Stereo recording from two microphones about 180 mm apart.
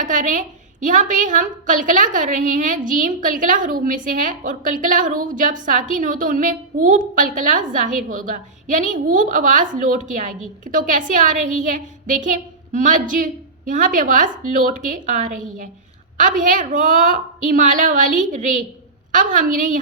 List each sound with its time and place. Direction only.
0.0 s a woman's voice: 45° right (ahead or behind)